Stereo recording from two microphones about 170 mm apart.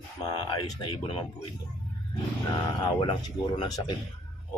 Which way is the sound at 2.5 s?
25° left (ahead or behind).